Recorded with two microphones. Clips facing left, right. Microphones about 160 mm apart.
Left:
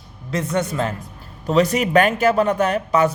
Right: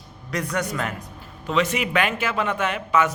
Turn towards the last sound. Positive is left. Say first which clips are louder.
# left 4 dB
turn(degrees=35)  # may be behind; listen again after turning